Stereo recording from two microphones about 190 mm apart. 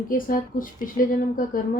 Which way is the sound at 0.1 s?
45° left (ahead or behind).